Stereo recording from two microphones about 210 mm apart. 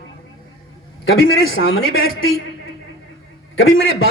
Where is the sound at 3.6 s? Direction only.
70° left (ahead or behind).